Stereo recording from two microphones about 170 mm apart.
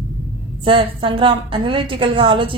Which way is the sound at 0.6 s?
30° right (ahead or behind).